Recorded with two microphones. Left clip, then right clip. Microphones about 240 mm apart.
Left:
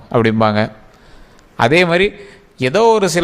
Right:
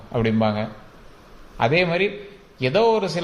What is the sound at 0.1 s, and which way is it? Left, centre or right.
A man's voice, left.